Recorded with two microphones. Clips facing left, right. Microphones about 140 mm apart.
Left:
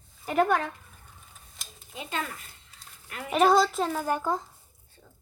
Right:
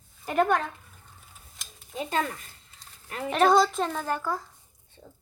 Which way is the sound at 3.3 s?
5° left (ahead or behind).